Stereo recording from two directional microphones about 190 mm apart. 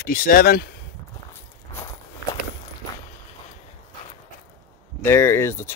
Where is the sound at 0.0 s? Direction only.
50° left (ahead or behind).